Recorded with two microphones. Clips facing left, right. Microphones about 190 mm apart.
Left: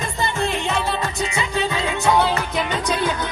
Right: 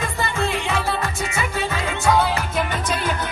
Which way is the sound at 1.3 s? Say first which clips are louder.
Left 2 dB; 15° left (ahead or behind).